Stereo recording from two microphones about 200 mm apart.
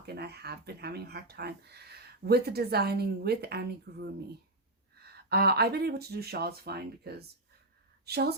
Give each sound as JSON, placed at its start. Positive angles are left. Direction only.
{"t": 0.0, "sound": "speech", "side_deg": -55}
{"t": 5.1, "sound": "speech", "side_deg": -50}